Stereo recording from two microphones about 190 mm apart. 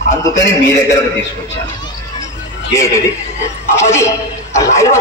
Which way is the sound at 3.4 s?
15° left (ahead or behind).